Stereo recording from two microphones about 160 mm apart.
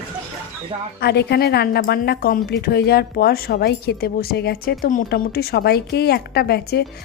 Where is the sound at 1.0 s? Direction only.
90° left.